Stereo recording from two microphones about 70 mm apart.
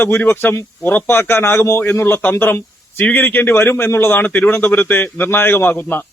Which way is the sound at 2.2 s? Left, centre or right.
Left.